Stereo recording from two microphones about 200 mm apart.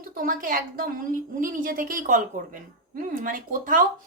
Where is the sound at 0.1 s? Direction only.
45° right (ahead or behind).